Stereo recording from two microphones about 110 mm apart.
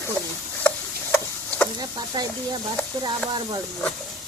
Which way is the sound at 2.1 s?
45° right (ahead or behind).